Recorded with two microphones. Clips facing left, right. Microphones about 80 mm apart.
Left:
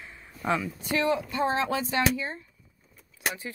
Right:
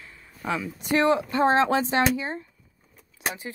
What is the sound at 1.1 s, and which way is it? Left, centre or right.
Speech, right.